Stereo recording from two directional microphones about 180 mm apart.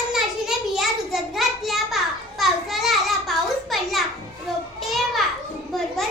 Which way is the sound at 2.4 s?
Centre (ahead or behind).